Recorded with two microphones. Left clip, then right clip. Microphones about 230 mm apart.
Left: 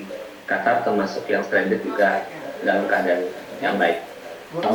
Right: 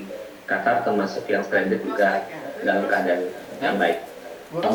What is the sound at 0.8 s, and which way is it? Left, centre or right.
Speech, centre.